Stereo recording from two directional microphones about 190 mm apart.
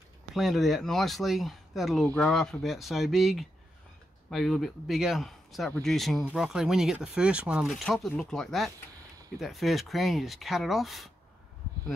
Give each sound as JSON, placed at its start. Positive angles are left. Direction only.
{"t": 0.4, "sound": "speech", "side_deg": 0}